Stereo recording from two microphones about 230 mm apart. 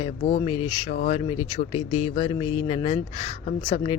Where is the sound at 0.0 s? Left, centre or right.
Left.